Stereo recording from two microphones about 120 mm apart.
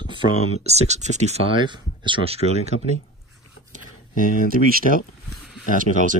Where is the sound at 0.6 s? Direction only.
65° right (ahead or behind).